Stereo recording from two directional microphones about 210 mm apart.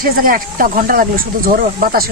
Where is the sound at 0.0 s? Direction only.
45° right (ahead or behind).